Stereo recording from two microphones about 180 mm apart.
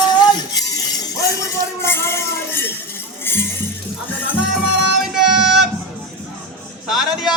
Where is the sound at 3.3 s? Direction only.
10° left (ahead or behind).